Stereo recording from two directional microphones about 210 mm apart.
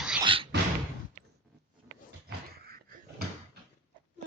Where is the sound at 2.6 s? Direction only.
45° right (ahead or behind).